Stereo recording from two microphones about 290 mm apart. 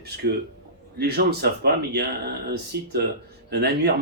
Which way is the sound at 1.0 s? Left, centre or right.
Right.